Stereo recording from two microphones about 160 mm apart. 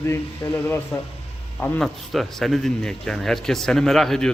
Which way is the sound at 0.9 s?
5° left (ahead or behind).